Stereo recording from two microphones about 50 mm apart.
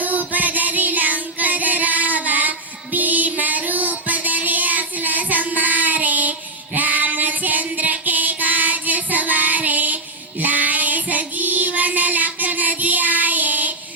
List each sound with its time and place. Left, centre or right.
0.0 s music: right
6.7 s child singing: right